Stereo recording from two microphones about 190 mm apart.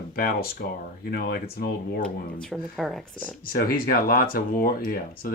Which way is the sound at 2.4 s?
Centre (ahead or behind).